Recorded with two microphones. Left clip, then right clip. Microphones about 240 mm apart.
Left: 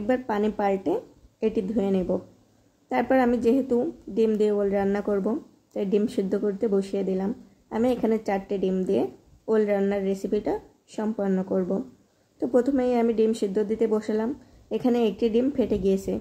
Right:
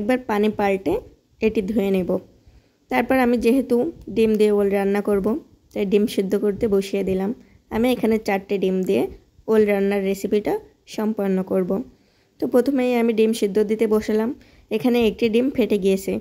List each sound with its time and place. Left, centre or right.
0.0 s speech: right